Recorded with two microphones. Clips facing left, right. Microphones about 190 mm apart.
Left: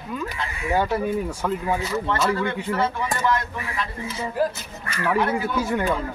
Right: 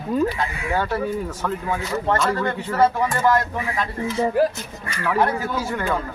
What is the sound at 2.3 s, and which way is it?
Speech, 40° right (ahead or behind).